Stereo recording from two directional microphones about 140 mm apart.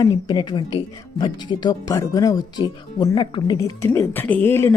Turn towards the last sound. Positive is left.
turn(degrees=15)  # may be behind; listen again after turning